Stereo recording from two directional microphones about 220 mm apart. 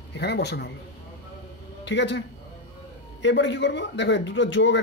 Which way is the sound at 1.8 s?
55° left (ahead or behind).